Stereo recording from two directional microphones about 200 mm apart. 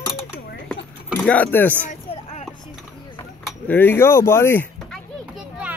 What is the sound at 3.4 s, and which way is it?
Speech, 10° left (ahead or behind).